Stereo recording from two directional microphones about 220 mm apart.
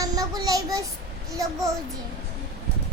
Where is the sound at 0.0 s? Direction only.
15° right (ahead or behind).